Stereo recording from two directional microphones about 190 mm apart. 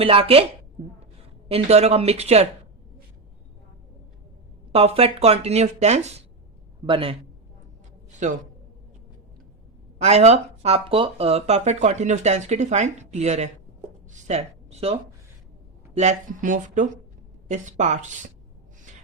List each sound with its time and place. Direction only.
0.0 s speech: 30° right (ahead or behind)
1.5 s speech: 35° right (ahead or behind)
4.7 s a man's voice: 30° right (ahead or behind)
8.2 s speech: 40° right (ahead or behind)
10.0 s speech: 35° right (ahead or behind)
16.0 s speech: 40° right (ahead or behind)